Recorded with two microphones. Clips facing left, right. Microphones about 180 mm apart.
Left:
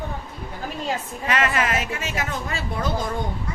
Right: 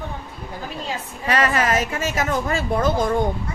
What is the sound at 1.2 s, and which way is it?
A woman's voice, 35° right (ahead or behind).